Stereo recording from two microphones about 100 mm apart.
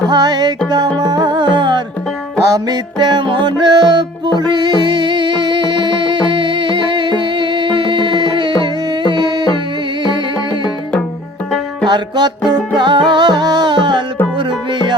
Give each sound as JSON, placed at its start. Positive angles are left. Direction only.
{"t": 0.1, "sound": "music", "side_deg": -45}
{"t": 2.4, "sound": "music", "side_deg": -35}
{"t": 3.0, "sound": "music", "side_deg": -50}
{"t": 11.9, "sound": "music", "side_deg": -50}